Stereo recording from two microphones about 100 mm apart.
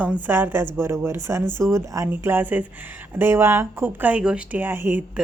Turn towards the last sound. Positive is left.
turn(degrees=-20)  # may be behind; listen again after turning